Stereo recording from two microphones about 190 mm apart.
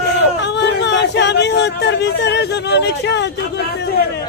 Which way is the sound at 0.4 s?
65° left (ahead or behind).